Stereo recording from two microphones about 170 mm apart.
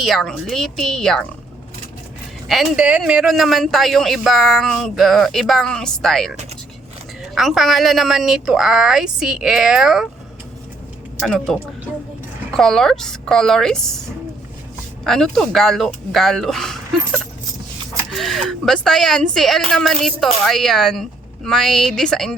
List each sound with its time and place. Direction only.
0.0 s speech: centre (ahead or behind)
2.5 s speech: 5° right (ahead or behind)
11.2 s speech: centre (ahead or behind)
15.0 s speech: centre (ahead or behind)